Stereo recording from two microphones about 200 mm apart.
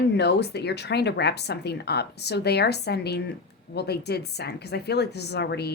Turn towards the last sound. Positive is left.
turn(degrees=55)  # may be behind; listen again after turning